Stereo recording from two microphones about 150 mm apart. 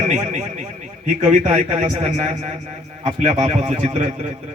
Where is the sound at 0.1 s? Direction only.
50° right (ahead or behind).